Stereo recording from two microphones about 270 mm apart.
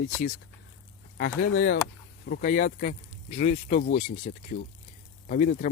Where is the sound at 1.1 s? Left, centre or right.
Left.